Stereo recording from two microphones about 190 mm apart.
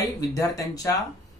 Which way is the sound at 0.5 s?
15° left (ahead or behind).